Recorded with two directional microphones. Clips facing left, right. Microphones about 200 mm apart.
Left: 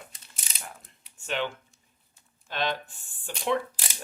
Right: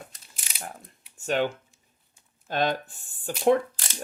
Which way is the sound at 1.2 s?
45° right (ahead or behind).